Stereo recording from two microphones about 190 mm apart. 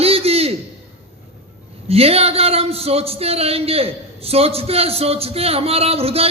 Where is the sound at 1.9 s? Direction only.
30° right (ahead or behind).